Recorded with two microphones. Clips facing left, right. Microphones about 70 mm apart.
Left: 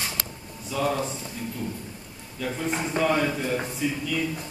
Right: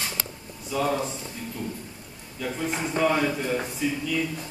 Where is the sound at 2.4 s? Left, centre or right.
Centre.